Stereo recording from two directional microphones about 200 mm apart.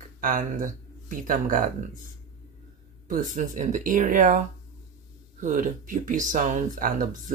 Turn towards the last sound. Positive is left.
turn(degrees=-40)  # may be behind; listen again after turning